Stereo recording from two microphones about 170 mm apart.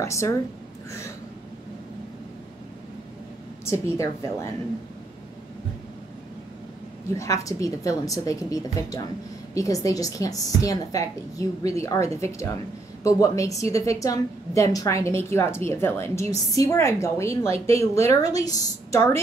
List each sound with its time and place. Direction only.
0.0 s a woman's voice: 15° left (ahead or behind)
3.6 s a woman's voice: 15° left (ahead or behind)
7.2 s a woman's voice: 20° left (ahead or behind)